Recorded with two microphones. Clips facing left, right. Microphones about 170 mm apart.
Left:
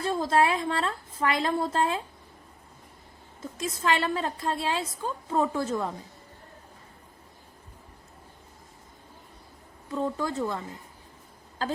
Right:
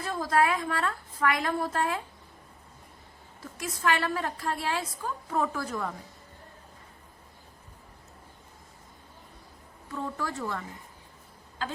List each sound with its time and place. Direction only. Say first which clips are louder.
0.0 s a woman's voice: left 2 dB; 25° left (ahead or behind)
3.6 s a woman's voice: left 1 dB; 25° left (ahead or behind)
9.9 s a woman's voice: left 5 dB; 20° left (ahead or behind)
11.6 s speech: left 5 dB; 40° left (ahead or behind)